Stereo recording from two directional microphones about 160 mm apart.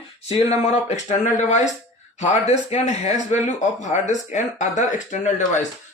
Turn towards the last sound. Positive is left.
turn(degrees=50)  # may be behind; listen again after turning